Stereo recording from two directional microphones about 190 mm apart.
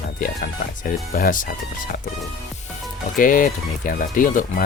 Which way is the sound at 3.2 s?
45° left (ahead or behind).